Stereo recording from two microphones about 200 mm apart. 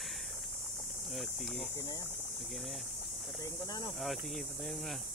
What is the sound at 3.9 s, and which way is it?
Speech, centre (ahead or behind).